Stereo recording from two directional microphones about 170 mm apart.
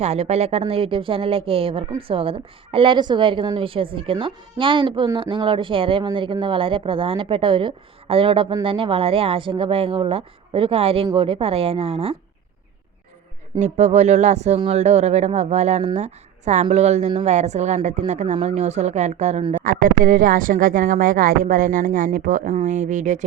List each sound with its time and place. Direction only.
0.0 s a woman's voice: 40° right (ahead or behind)
13.6 s a woman's voice: 40° right (ahead or behind)
19.6 s speech: 55° right (ahead or behind)